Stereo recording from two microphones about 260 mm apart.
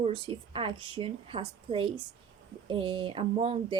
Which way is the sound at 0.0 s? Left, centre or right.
Centre.